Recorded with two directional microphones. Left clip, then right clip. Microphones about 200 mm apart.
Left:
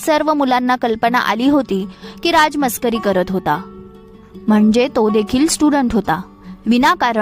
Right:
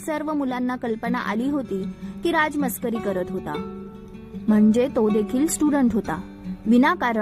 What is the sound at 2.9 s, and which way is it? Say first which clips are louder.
Speech: left 9 dB; 45° left (ahead or behind).